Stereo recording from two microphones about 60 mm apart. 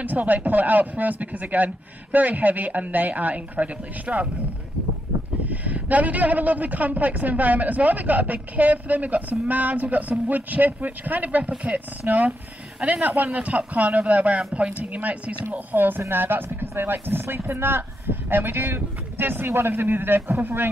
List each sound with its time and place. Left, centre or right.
0.0 s a man's voice: right
5.5 s a man's voice: right